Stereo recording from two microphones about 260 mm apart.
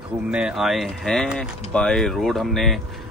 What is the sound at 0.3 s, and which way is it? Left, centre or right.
Speech, centre.